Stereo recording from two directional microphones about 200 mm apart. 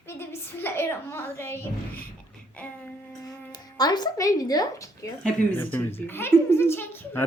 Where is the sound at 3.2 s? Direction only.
20° left (ahead or behind).